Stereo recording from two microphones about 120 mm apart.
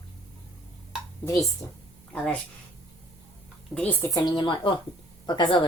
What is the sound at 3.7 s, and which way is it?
Speech, 15° left (ahead or behind).